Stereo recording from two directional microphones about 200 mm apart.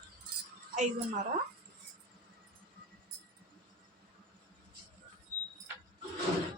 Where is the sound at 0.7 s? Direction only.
40° right (ahead or behind).